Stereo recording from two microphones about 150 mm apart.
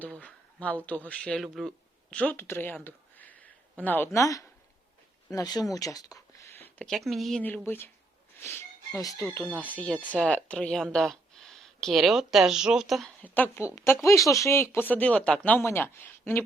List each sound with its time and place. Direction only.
0.0 s a sound: 10° left (ahead or behind)
0.9 s speech: 10° left (ahead or behind); by 6.6 s 25° left (ahead or behind)
6.6 s speech: 5° left (ahead or behind)
7.4 s speech: 10° left (ahead or behind)
9.4 s speech: 10° left (ahead or behind)
13.2 s speech: 10° left (ahead or behind)